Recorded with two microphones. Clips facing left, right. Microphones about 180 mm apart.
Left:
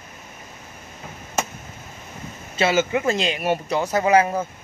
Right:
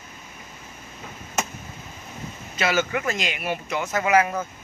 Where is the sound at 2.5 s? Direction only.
25° left (ahead or behind).